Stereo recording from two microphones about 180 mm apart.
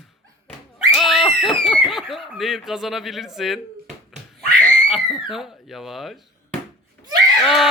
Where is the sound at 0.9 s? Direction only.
Centre (ahead or behind).